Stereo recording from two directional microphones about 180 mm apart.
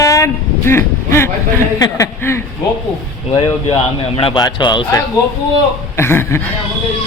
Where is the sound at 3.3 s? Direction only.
30° left (ahead or behind).